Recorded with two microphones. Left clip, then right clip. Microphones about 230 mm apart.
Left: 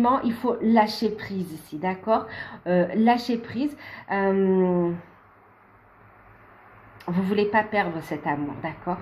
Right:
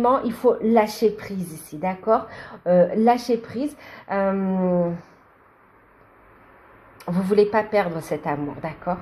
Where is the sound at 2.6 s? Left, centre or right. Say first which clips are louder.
Right 5 dB; centre.